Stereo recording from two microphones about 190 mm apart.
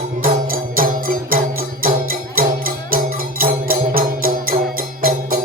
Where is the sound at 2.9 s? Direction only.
50° right (ahead or behind).